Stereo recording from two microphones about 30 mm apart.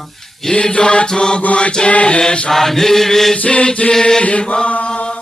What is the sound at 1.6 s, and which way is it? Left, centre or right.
Mantra, left.